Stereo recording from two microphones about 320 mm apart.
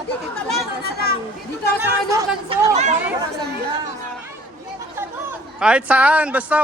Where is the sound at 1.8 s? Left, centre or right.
Centre.